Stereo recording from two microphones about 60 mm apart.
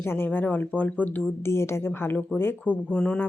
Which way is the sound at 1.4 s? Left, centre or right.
Left.